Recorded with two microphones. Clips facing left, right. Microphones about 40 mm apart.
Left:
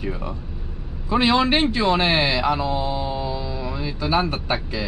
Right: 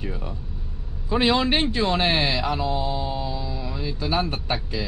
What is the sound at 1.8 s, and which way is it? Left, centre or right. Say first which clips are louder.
Speech: left 3 dB; left.